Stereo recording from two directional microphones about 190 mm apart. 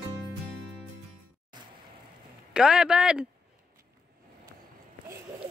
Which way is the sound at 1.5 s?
20° right (ahead or behind).